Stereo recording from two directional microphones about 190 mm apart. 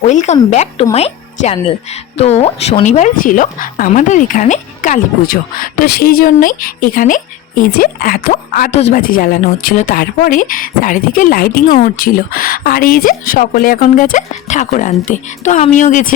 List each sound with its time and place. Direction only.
0.0 s a woman's voice: 35° left (ahead or behind)
5.8 s speech: 55° left (ahead or behind); by 9.0 s 40° left (ahead or behind)
9.1 s speech: 50° left (ahead or behind)